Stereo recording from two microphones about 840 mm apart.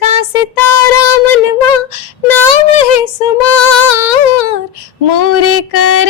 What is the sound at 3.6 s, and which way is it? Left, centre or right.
Music, left.